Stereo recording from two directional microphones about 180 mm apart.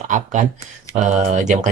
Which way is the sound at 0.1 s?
45° right (ahead or behind).